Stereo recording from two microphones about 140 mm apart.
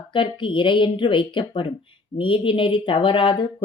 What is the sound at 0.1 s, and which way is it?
Speech, 35° left (ahead or behind).